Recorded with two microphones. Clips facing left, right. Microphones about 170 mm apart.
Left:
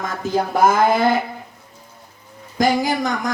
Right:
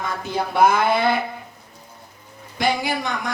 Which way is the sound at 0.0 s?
40° left (ahead or behind).